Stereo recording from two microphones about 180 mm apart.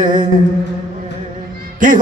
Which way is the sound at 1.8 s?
45° right (ahead or behind).